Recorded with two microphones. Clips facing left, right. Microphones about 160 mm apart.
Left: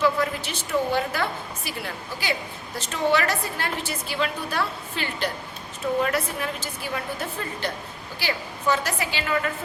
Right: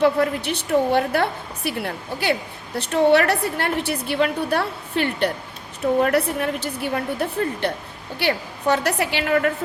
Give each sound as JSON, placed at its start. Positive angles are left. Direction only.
{"t": 0.0, "sound": "a woman's voice", "side_deg": -60}